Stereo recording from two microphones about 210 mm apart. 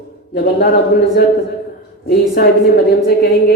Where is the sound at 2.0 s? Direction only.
45° left (ahead or behind).